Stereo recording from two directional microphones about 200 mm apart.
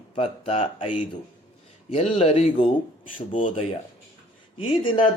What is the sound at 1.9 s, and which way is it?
Speech, 30° left (ahead or behind).